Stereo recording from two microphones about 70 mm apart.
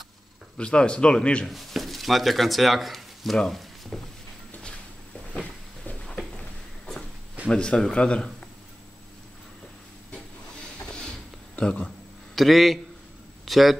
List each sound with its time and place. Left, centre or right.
0.6 s speech: centre
1.5 s speech: centre
5.3 s a sound: centre
7.4 s speech: centre
11.5 s speech: centre
12.4 s a man's voice: centre